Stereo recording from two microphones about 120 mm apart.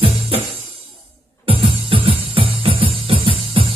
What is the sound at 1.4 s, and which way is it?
Music, 45° right (ahead or behind).